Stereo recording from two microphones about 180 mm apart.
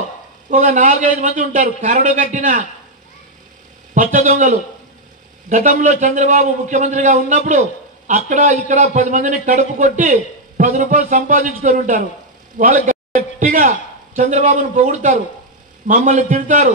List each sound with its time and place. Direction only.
0.5 s a man's voice: 45° right (ahead or behind)
3.9 s a man's voice: 45° right (ahead or behind)